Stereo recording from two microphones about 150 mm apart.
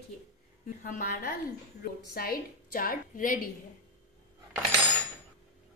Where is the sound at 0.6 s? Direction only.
70° left (ahead or behind).